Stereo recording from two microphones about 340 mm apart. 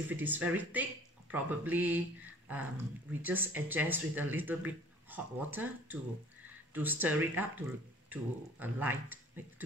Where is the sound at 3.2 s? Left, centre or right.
Centre.